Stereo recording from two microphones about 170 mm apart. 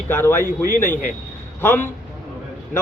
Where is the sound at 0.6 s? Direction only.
55° left (ahead or behind).